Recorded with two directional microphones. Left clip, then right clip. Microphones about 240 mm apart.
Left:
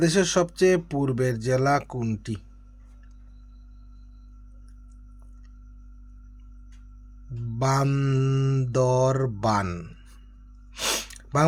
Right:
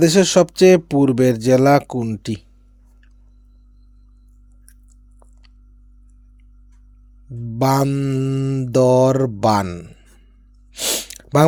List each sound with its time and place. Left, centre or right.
0.0 s speech: right
1.9 s speech: centre
7.6 s speech: right
7.9 s mantra: centre
8.7 s speech: right
9.6 s speech: centre
10.7 s sneeze: centre
11.1 s a sound: right